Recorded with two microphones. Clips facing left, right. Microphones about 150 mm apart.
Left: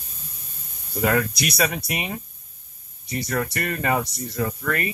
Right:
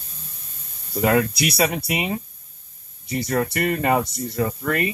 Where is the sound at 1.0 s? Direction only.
5° right (ahead or behind).